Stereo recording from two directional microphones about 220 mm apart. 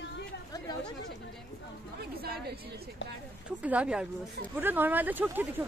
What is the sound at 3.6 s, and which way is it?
Speech, 5° right (ahead or behind).